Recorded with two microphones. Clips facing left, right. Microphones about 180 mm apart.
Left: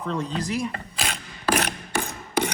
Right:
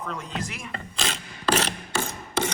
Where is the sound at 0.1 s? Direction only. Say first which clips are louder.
Left 11 dB; 35° left (ahead or behind).